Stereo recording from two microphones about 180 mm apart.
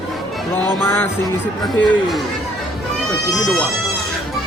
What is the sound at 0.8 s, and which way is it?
Music, 15° left (ahead or behind).